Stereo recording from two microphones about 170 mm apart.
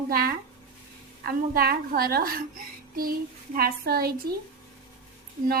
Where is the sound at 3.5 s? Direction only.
60° right (ahead or behind).